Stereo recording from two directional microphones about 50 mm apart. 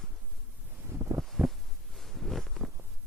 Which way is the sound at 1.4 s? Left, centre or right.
Centre.